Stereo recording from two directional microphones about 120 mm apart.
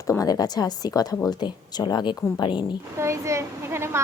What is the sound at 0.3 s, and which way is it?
Speech, 30° left (ahead or behind).